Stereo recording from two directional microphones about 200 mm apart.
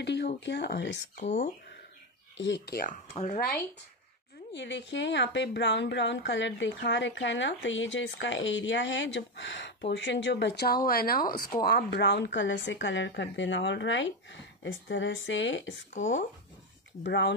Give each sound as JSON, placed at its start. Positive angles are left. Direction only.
{"t": 0.0, "sound": "a sound", "side_deg": 60}
{"t": 0.5, "sound": "speech", "side_deg": 60}
{"t": 4.5, "sound": "speech", "side_deg": 60}
{"t": 17.0, "sound": "speech", "side_deg": 65}